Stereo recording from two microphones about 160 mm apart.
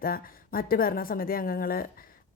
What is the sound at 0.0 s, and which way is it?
Speech, 65° left (ahead or behind).